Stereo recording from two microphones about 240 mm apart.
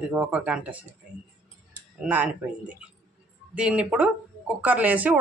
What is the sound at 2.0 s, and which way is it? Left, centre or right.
A man's voice, centre.